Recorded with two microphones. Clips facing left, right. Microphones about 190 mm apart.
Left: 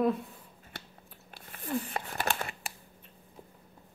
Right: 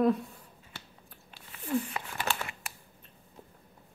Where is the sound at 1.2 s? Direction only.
50° left (ahead or behind).